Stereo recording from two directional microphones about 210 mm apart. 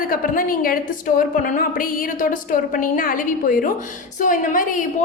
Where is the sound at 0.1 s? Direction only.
40° left (ahead or behind).